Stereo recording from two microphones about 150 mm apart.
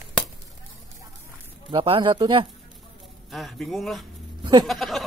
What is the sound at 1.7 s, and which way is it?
Speech, 35° right (ahead or behind).